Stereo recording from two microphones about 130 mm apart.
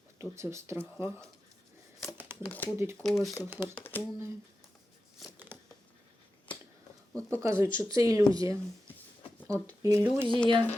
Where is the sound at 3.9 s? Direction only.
15° left (ahead or behind).